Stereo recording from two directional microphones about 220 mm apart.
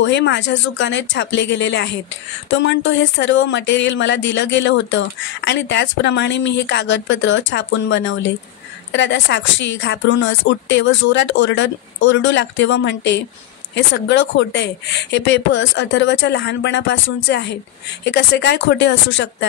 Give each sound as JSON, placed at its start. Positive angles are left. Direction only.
{"t": 0.0, "sound": "speech", "side_deg": 55}